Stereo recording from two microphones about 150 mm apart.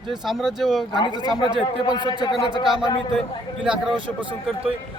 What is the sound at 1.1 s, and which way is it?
Speech, 30° right (ahead or behind).